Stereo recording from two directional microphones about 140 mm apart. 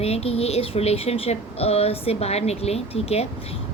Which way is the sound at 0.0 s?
45° left (ahead or behind).